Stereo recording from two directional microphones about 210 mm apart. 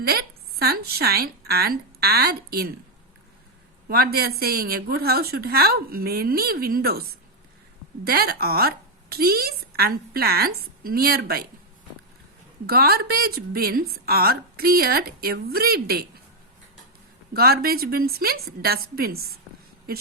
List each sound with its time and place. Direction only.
0.0 s speech: 45° right (ahead or behind)
3.8 s a woman's voice: 45° right (ahead or behind)
8.0 s a woman's voice: 45° right (ahead or behind)
12.6 s a woman's voice: 45° right (ahead or behind)
17.3 s a woman's voice: 45° right (ahead or behind)